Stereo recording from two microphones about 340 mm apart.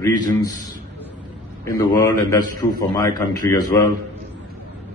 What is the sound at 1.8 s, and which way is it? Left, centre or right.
A man's voice, centre.